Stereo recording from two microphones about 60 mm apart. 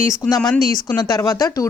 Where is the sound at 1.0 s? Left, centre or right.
Left.